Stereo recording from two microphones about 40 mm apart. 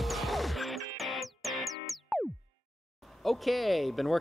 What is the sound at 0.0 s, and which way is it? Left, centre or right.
Music, centre.